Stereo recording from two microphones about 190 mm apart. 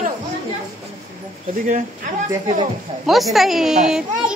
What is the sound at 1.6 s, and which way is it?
Speech, 45° right (ahead or behind).